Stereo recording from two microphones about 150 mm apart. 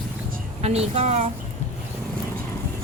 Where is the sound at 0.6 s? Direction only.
45° right (ahead or behind).